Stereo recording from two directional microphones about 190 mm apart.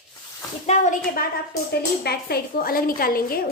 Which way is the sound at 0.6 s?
40° left (ahead or behind).